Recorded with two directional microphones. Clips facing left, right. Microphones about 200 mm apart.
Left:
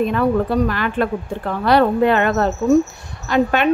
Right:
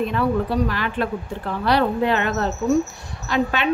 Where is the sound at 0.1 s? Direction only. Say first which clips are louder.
Left 4 dB; 50° left (ahead or behind).